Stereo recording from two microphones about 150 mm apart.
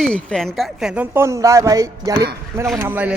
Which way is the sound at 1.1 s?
20° right (ahead or behind).